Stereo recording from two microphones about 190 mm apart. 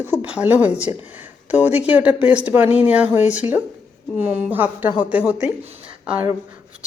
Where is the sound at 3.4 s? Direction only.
30° left (ahead or behind).